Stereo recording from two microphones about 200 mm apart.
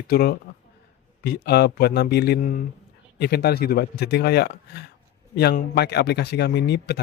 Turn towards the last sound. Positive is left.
turn(degrees=55)  # may be behind; listen again after turning